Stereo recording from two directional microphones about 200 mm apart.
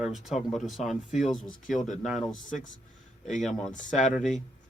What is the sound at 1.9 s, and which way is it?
Speech, centre (ahead or behind).